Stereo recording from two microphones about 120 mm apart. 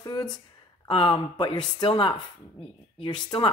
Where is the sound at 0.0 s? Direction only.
35° left (ahead or behind).